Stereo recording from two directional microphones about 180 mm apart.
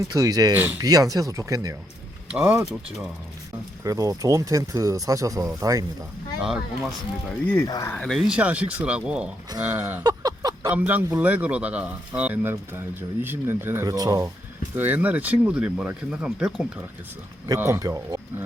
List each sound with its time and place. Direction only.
0.1 s speech: 20° right (ahead or behind)
2.3 s speech: 10° right (ahead or behind)
3.8 s speech: 20° right (ahead or behind)
7.3 s speech: 10° left (ahead or behind)
7.9 s speech: centre (ahead or behind)
9.8 s a sound: 20° right (ahead or behind)
10.8 s speech: 10° right (ahead or behind)
14.8 s speech: 10° right (ahead or behind)
17.5 s speech: 15° right (ahead or behind)